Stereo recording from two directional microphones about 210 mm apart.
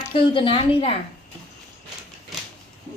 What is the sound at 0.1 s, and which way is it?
Speech, 25° left (ahead or behind).